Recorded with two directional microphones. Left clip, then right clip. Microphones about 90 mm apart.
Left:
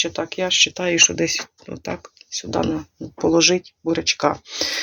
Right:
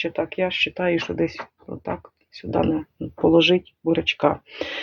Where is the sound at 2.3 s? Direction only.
10° right (ahead or behind).